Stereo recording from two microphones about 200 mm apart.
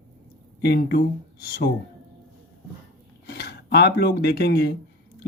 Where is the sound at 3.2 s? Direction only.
55° left (ahead or behind).